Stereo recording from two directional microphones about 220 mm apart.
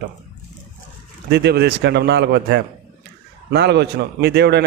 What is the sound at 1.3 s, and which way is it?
A man's voice, 50° right (ahead or behind).